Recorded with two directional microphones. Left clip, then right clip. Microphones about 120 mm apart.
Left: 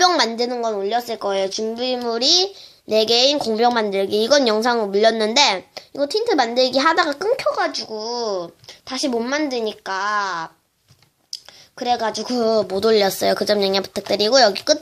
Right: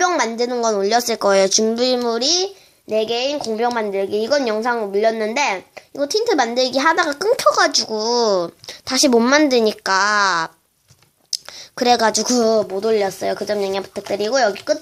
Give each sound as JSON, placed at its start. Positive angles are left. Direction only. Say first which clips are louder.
{"t": 0.0, "sound": "a woman's voice", "louder": "left 1 dB", "side_deg": 5}
{"t": 0.8, "sound": "speech", "louder": "right 5 dB", "side_deg": -35}
{"t": 2.0, "sound": "speech", "louder": "left 1 dB", "side_deg": -10}
{"t": 2.9, "sound": "a woman's voice", "louder": "left 3 dB", "side_deg": 20}
{"t": 6.0, "sound": "speech", "louder": "right 1 dB", "side_deg": -5}
{"t": 7.3, "sound": "speech", "louder": "right 6 dB", "side_deg": -30}
{"t": 11.3, "sound": "whispering", "louder": "right 8 dB", "side_deg": -40}
{"t": 11.8, "sound": "speech", "louder": "right 6 dB", "side_deg": -40}
{"t": 12.6, "sound": "a woman's voice", "louder": "left 2 dB", "side_deg": 20}